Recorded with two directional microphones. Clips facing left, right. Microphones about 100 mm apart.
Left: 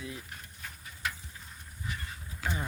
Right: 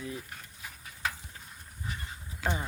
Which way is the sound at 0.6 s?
10° right (ahead or behind).